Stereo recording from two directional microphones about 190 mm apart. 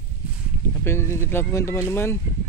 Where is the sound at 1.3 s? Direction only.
15° left (ahead or behind).